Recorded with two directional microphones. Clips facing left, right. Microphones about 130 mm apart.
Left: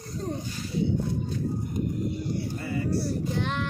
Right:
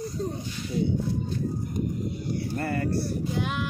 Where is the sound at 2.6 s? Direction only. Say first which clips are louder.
Right 3 dB; 60° right (ahead or behind).